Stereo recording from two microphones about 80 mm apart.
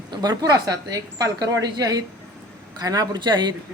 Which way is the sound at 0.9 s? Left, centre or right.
Right.